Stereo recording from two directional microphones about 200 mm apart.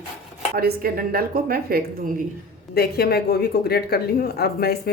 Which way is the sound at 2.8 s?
50° left (ahead or behind).